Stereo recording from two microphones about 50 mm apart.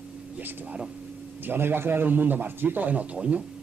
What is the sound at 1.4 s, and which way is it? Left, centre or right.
A man's voice, right.